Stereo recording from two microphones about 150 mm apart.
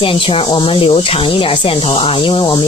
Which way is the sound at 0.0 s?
35° left (ahead or behind).